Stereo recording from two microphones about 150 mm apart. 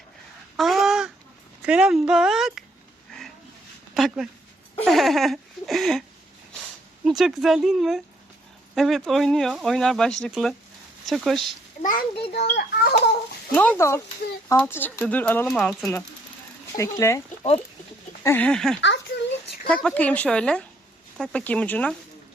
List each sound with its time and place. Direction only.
0.5 s a sound: centre (ahead or behind)
1.6 s speech: 5° right (ahead or behind)
3.9 s a sound: centre (ahead or behind)
7.0 s speech: 5° right (ahead or behind)
11.8 s a child's voice: 65° left (ahead or behind)
12.3 s a child's voice: 90° left
13.5 s speech: 10° left (ahead or behind)
16.7 s speech: 20° left (ahead or behind)
18.2 s speech: 20° left (ahead or behind)
18.4 s speech: 5° left (ahead or behind)